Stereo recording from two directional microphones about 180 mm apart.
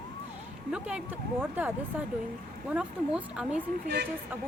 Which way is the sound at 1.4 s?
10° right (ahead or behind).